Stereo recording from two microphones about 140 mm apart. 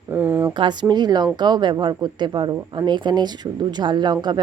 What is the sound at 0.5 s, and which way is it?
Speech, 35° right (ahead or behind).